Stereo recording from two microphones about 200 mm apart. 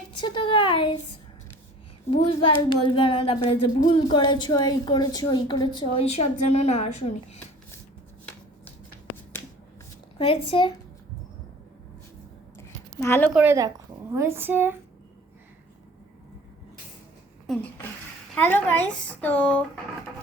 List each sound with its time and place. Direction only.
0.2 s speech: 25° left (ahead or behind)
2.0 s speech: 25° left (ahead or behind)
10.2 s speech: 25° left (ahead or behind)
12.5 s a sound: 10° left (ahead or behind)
13.3 s a woman's voice: 10° right (ahead or behind)
17.4 s a sound: centre (ahead or behind)
18.4 s speech: 10° left (ahead or behind)